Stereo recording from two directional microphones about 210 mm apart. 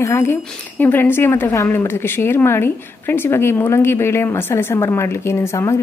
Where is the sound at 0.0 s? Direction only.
15° left (ahead or behind).